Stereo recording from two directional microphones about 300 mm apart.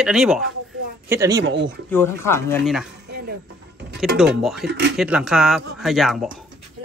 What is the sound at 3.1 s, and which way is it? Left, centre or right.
Music, right.